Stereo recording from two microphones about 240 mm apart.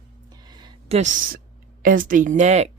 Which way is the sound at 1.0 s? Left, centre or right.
Right.